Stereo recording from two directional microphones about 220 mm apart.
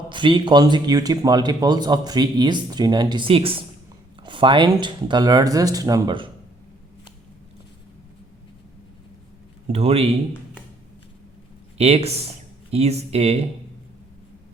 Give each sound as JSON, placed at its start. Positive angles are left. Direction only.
{"t": 0.1, "sound": "speech", "side_deg": -20}
{"t": 9.7, "sound": "speech", "side_deg": -25}
{"t": 11.8, "sound": "speech", "side_deg": -30}